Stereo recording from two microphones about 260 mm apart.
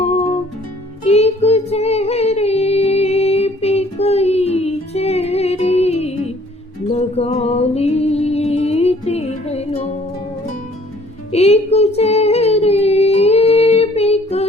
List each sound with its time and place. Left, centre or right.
1.0 s child singing: left
6.9 s music: left
11.3 s child singing: left